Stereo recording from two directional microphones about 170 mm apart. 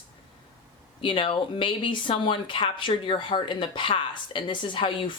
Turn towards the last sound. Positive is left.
turn(degrees=30)  # may be behind; listen again after turning